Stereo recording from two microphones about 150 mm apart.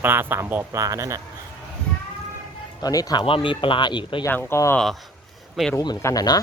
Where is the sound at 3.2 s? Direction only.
35° left (ahead or behind).